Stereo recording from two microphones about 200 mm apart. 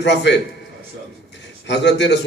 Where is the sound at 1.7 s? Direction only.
60° left (ahead or behind).